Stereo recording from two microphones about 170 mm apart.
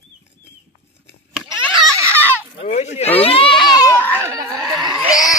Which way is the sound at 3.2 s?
35° left (ahead or behind).